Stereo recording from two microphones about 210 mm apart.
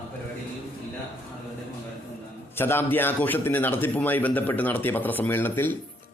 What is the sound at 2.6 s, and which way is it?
A man's voice, 10° left (ahead or behind).